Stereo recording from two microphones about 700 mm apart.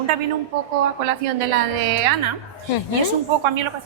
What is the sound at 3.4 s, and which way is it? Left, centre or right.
Speech, right.